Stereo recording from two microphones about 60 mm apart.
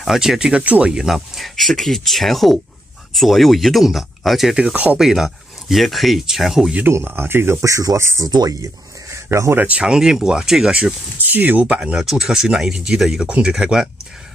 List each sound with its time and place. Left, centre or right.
0.0 s speech: centre
0.9 s speech: centre
7.1 s speech: right
7.6 s speech: right
8.0 s speech: right
9.1 s a sound: right
9.6 s speech: right
11.1 s speech: right
11.7 s speech: centre